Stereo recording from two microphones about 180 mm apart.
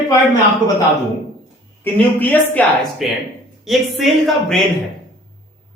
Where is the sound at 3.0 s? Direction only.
Centre (ahead or behind).